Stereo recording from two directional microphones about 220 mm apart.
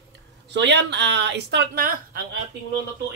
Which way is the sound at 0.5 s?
50° right (ahead or behind).